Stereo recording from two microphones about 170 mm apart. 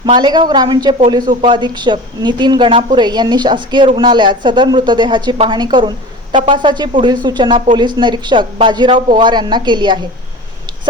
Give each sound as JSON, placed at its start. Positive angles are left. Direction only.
{"t": 0.0, "sound": "speech", "side_deg": -25}